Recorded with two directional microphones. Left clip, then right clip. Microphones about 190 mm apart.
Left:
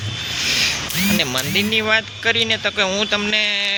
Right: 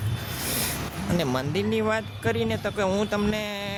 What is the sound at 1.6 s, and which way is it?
Speech, 15° right (ahead or behind).